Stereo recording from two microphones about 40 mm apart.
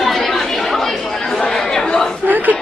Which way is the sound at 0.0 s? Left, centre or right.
Centre.